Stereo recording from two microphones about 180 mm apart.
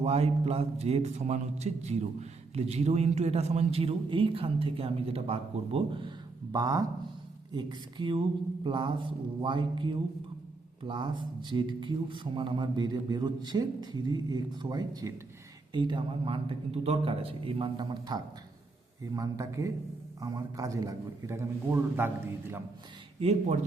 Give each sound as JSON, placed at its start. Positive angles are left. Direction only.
{"t": 0.0, "sound": "a man's voice", "side_deg": -35}